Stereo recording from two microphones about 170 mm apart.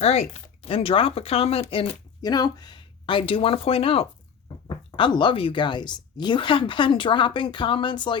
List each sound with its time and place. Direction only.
0.0 s a woman's voice: 35° left (ahead or behind)